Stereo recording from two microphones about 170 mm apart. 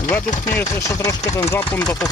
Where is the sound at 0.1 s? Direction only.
15° left (ahead or behind).